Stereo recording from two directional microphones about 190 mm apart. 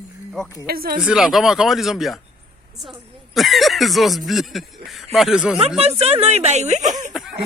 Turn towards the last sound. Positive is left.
turn(degrees=-40)  # may be behind; listen again after turning